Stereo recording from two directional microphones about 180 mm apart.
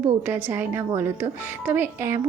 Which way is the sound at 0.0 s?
10° right (ahead or behind).